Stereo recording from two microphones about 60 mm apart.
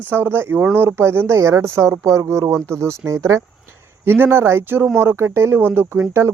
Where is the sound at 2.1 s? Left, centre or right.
Right.